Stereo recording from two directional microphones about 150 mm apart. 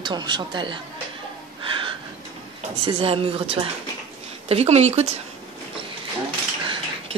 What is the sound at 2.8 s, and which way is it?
A woman's voice, 40° right (ahead or behind).